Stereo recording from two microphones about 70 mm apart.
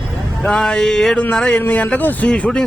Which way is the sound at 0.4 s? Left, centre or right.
Centre.